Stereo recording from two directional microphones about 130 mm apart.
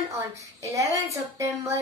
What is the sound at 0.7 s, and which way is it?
Speech, 25° right (ahead or behind).